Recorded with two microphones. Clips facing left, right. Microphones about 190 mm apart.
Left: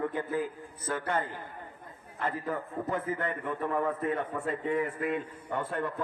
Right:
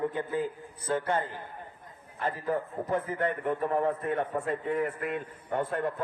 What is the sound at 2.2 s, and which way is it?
A man's voice, 30° right (ahead or behind).